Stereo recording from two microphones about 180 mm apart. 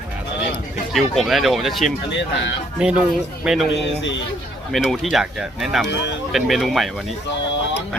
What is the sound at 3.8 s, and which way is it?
Speech, 80° left.